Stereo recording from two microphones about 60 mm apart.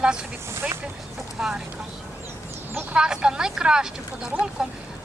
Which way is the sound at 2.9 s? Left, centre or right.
Centre.